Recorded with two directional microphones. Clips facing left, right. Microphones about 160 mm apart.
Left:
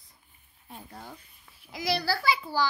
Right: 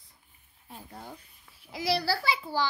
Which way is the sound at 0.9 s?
20° right (ahead or behind).